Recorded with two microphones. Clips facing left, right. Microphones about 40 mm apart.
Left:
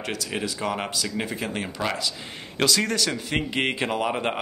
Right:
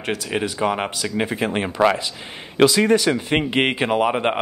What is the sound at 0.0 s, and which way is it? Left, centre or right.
Speech, right.